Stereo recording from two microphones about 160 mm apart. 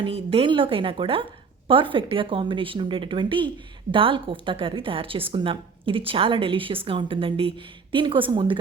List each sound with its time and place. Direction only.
0.0 s a woman's voice: 35° right (ahead or behind)